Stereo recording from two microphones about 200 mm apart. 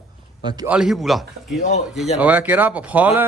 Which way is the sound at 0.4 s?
20° right (ahead or behind).